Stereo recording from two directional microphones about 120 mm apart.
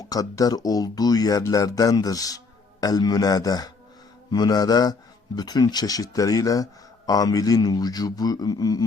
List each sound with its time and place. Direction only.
0.0 s speech: 30° left (ahead or behind)